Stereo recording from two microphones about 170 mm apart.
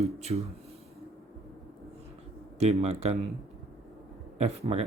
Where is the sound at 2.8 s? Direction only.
40° right (ahead or behind).